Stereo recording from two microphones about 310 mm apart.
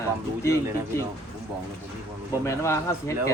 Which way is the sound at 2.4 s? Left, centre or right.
Centre.